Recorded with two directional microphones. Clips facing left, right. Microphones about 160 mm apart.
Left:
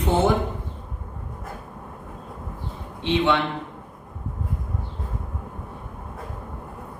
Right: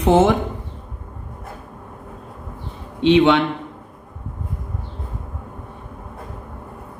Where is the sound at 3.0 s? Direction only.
75° right (ahead or behind).